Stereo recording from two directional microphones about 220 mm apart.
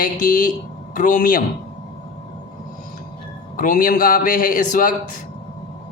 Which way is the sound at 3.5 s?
40° left (ahead or behind).